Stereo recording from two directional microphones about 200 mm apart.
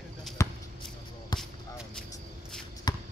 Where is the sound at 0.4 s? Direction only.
15° left (ahead or behind).